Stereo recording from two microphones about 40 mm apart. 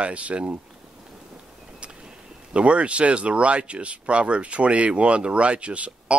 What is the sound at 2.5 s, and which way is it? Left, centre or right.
Speech, right.